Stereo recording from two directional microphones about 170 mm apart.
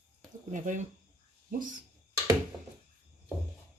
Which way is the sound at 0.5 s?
50° right (ahead or behind).